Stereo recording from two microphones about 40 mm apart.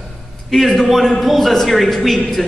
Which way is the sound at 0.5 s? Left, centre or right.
Centre.